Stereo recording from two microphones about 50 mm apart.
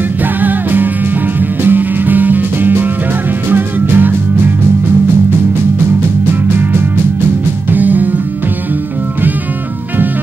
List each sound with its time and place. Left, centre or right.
0.4 s music: right
7.7 s music: right